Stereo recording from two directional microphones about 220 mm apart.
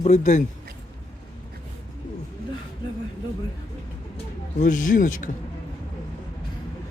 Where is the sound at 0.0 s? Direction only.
35° left (ahead or behind).